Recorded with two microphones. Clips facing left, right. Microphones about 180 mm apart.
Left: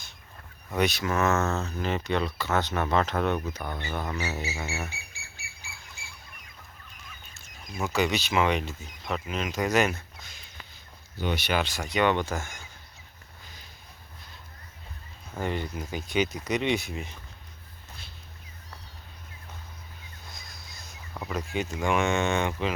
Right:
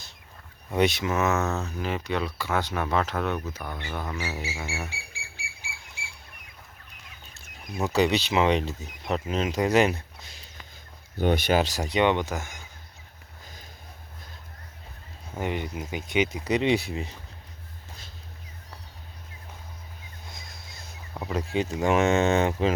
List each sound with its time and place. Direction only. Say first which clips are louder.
0.7 s speech: right 3 dB; 25° right (ahead or behind)
4.9 s bird: right 2 dB; 90° right
7.9 s speech: right 3 dB; 30° right (ahead or behind)
11.2 s speech: right 5 dB; 50° right (ahead or behind); by 12.0 s 30° right (ahead or behind)
12.0 s speech: left 1 dB; 15° right (ahead or behind)
15.4 s speech: right 1 dB; 15° right (ahead or behind); by 16.9 s 30° right (ahead or behind)
20.2 s a sound: right 2 dB; 25° right (ahead or behind)
21.3 s speech: right 4 dB; 30° right (ahead or behind)